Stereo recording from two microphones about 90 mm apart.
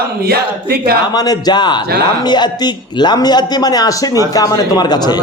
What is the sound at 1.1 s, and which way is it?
A man's voice, 45° left (ahead or behind).